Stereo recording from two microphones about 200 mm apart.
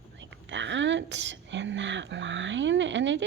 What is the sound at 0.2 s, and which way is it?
Speech, 65° right (ahead or behind).